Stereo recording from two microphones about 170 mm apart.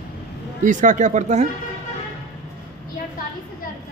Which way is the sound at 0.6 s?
50° right (ahead or behind).